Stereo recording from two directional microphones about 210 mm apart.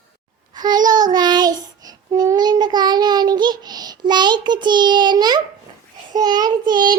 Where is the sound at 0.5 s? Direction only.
20° right (ahead or behind).